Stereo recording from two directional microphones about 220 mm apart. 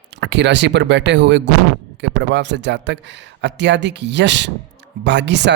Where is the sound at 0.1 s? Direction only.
55° right (ahead or behind).